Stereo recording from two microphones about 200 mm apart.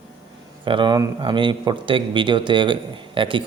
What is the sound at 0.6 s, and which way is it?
Speech, 25° right (ahead or behind).